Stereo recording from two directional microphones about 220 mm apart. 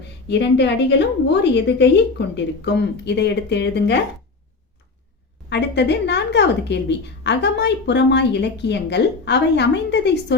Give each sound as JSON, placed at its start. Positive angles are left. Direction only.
{"t": 0.3, "sound": "a woman's voice", "side_deg": 50}
{"t": 5.5, "sound": "a woman's voice", "side_deg": 50}